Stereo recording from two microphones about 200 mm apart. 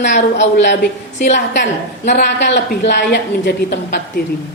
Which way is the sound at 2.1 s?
55° left (ahead or behind).